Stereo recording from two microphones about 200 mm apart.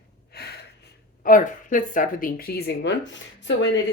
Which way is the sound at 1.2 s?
45° left (ahead or behind).